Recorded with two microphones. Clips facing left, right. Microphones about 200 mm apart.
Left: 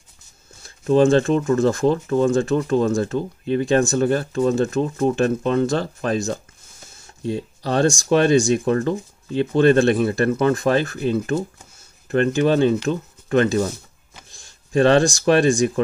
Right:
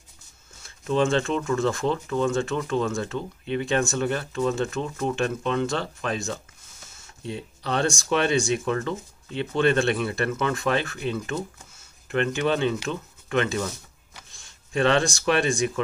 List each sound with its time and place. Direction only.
0.6 s speech: 35° left (ahead or behind)